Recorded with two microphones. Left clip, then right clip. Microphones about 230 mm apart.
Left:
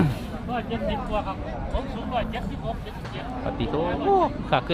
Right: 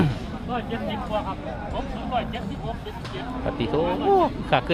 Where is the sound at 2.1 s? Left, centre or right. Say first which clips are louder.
Right 1 dB; left.